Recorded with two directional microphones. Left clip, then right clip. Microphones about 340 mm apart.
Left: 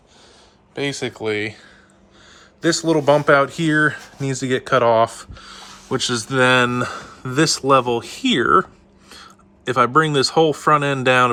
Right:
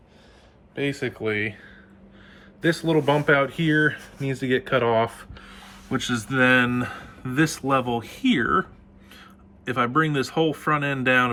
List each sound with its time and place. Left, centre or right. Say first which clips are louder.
0.8 s speech: left 3 dB; centre
2.6 s speech: left 4 dB; centre